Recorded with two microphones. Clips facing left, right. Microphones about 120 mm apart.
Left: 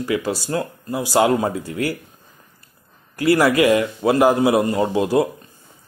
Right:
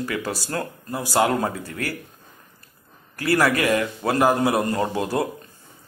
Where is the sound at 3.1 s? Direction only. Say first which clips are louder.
Left 5 dB; 20° left (ahead or behind).